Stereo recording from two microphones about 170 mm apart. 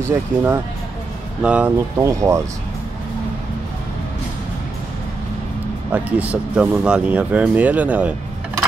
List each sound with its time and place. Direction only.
0.0 s speech: 15° right (ahead or behind)
5.9 s speech: 10° right (ahead or behind)